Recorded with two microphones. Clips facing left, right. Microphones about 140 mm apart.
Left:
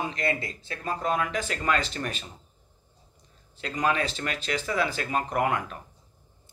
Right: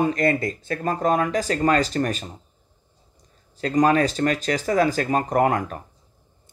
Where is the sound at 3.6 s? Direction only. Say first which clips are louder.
Right 9 dB; 40° right (ahead or behind).